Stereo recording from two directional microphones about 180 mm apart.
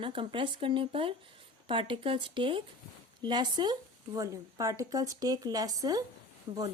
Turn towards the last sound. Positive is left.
turn(degrees=-30)  # may be behind; listen again after turning